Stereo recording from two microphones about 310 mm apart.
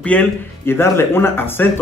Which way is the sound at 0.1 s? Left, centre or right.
Centre.